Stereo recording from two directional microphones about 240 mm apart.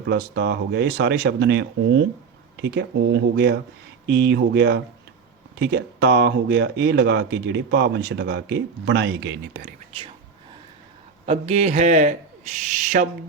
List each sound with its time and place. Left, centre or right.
0.1 s speech: right
11.3 s a man's voice: right